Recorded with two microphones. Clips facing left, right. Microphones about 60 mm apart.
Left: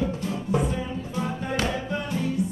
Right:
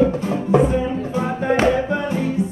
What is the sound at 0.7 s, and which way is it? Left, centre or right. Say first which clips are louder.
Music: right 9 dB; right.